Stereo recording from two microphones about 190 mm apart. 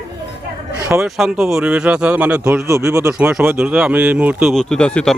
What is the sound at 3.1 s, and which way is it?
Speech, 5° right (ahead or behind).